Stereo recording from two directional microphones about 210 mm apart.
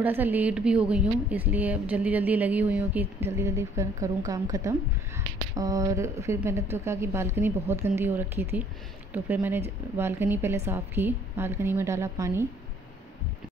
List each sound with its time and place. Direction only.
0.0 s speech: 10° right (ahead or behind)